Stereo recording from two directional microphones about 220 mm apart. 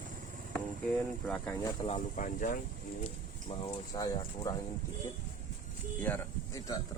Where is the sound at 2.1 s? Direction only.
35° left (ahead or behind).